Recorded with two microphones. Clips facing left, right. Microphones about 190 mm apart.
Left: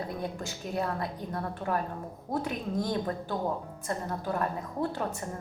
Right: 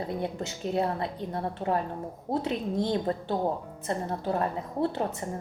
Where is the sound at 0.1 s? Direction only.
25° right (ahead or behind).